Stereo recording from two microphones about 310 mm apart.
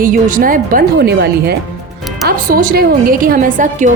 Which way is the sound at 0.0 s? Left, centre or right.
Right.